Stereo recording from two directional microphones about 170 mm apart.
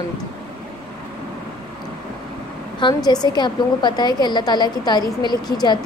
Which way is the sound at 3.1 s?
25° left (ahead or behind).